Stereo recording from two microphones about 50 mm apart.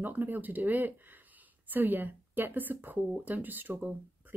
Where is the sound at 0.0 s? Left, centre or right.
Right.